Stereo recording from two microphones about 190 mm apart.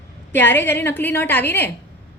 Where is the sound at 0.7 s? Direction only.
10° left (ahead or behind).